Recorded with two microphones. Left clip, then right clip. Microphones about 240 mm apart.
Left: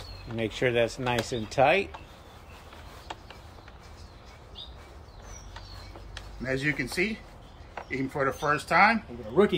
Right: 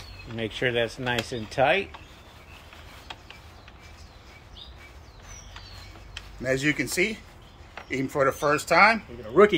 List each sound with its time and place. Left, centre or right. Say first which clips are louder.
0.4 s speech: even; centre
6.4 s speech: right 4 dB; right
9.3 s speech: right 6 dB; centre